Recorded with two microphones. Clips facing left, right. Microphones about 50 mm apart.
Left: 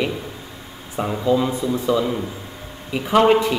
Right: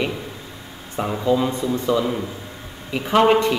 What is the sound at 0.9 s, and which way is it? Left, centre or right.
Speech, centre.